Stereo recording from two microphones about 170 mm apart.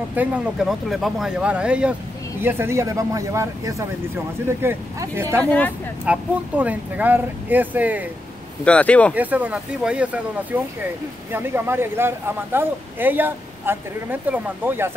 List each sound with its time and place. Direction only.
0.1 s a man's voice: 10° right (ahead or behind)
5.4 s speech: 10° left (ahead or behind)
6.0 s a man's voice: 10° right (ahead or behind)
8.6 s speech: 5° left (ahead or behind)
9.1 s a man's voice: 10° right (ahead or behind)